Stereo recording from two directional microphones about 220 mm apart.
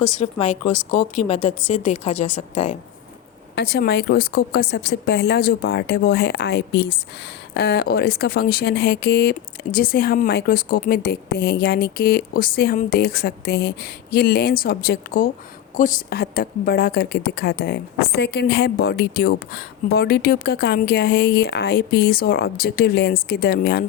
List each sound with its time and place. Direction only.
0.2 s speech: 30° left (ahead or behind)
3.5 s a woman's voice: 45° left (ahead or behind)